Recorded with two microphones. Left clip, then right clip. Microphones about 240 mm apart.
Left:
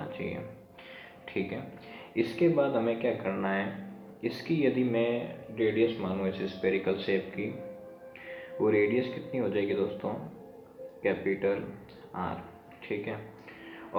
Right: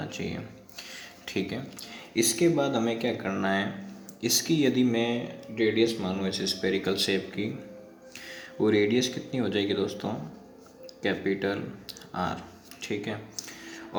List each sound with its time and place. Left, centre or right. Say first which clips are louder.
0.1 s a sound: right 1 dB; right
2.1 s speech: right 2 dB; right
8.6 s speech: right 2 dB; right
12.8 s speech: right 2 dB; right